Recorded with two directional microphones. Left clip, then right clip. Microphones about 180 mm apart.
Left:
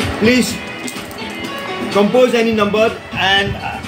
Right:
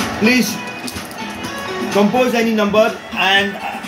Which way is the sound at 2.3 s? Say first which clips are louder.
Left 1 dB; 15° right (ahead or behind).